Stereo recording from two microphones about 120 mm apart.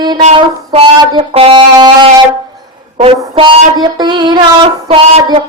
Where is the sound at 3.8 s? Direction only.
35° right (ahead or behind).